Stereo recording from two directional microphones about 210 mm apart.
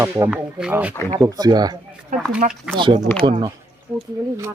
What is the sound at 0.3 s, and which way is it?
Speech, 5° right (ahead or behind).